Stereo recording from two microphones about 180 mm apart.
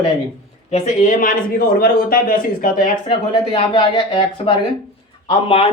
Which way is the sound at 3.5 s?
30° left (ahead or behind).